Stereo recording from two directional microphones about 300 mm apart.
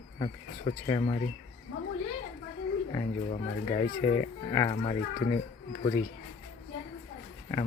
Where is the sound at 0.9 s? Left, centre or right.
Centre.